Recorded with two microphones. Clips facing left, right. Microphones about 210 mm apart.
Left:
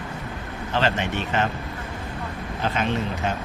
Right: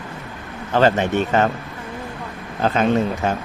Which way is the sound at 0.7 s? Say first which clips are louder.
Right 8 dB; 45° right (ahead or behind).